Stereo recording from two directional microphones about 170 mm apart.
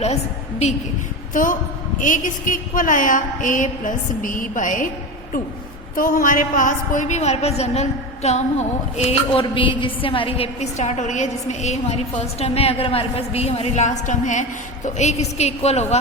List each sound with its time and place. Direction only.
1.3 s a woman's voice: 50° left (ahead or behind)
2.0 s a sound: 50° left (ahead or behind)
6.0 s a woman's voice: 55° left (ahead or behind)